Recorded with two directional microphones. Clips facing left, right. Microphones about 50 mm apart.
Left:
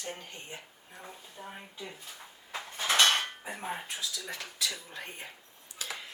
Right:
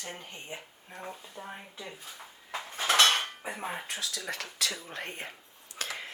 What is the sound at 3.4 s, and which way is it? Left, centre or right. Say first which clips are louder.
Speech: right 1 dB; right.